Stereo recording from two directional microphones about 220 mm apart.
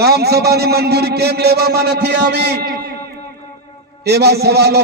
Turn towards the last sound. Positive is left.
turn(degrees=-45)  # may be behind; listen again after turning